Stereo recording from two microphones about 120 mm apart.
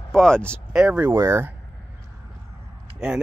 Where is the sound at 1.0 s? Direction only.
20° right (ahead or behind).